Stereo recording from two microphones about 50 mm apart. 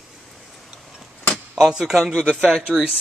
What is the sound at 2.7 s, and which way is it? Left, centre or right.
Speech, centre.